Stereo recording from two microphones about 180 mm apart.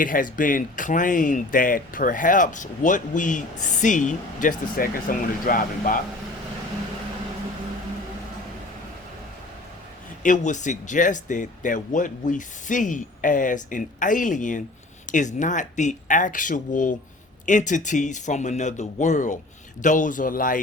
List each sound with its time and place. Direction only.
0.0 s speech: 50° left (ahead or behind)
10.2 s speech: 45° left (ahead or behind)